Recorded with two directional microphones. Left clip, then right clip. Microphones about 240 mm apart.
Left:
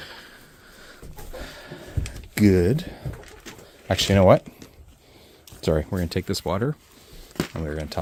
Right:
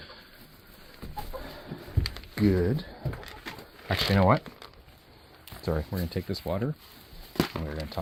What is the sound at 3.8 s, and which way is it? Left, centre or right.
Speech, left.